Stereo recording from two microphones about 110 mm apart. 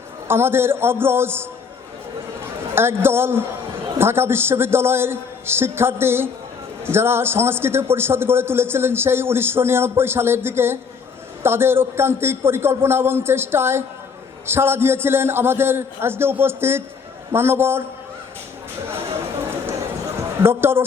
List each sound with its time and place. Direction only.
0.3 s a man's voice: 20° right (ahead or behind)
2.7 s a man's voice: 20° right (ahead or behind)
20.4 s a man's voice: 20° right (ahead or behind)